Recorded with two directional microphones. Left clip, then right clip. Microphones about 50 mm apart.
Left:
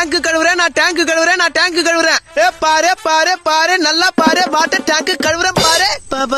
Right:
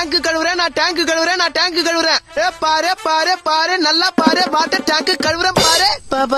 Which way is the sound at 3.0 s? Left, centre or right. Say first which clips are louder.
Left 3 dB; left.